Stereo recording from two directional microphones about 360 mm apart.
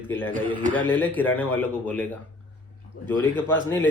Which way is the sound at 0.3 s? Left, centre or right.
Centre.